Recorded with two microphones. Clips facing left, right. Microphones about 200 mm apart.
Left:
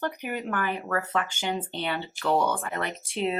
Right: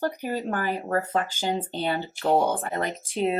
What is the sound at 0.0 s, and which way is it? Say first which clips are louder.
Speech: right 3 dB; 35° right (ahead or behind).